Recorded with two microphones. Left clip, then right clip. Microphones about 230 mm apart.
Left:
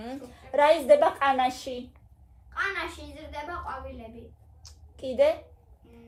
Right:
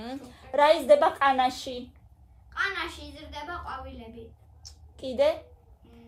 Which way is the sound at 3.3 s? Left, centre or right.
Centre.